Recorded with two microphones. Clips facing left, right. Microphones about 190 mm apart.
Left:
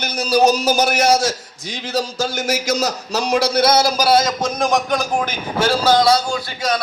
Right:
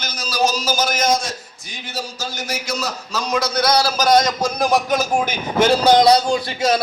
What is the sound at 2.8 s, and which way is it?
Speech, 40° left (ahead or behind).